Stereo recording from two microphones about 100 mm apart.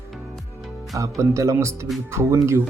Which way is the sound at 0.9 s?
30° right (ahead or behind).